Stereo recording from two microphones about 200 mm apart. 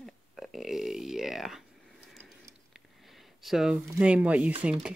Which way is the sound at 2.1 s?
Centre (ahead or behind).